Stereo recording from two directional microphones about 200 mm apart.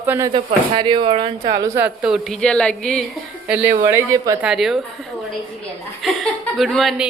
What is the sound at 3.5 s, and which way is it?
A woman's voice, 5° right (ahead or behind).